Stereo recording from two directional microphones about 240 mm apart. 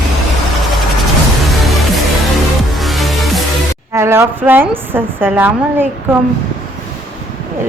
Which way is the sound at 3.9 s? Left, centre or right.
Centre.